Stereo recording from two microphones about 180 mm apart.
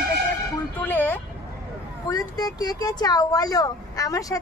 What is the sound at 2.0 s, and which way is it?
Speech, 20° left (ahead or behind).